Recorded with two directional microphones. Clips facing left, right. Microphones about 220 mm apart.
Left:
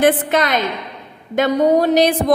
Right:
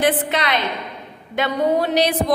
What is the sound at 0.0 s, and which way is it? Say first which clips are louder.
A woman's voice: left 5 dB; 45° left (ahead or behind).